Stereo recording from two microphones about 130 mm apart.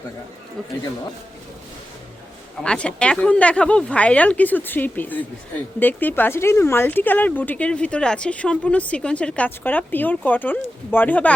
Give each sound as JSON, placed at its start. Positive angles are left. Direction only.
{"t": 2.6, "sound": "speech", "side_deg": 10}